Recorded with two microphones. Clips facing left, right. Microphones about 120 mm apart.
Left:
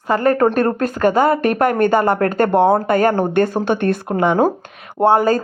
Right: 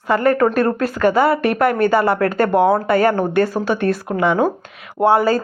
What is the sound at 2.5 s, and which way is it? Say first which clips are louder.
Speech: left 1 dB; 25° left (ahead or behind).